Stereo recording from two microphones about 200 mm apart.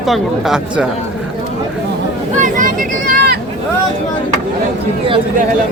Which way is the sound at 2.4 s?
40° right (ahead or behind).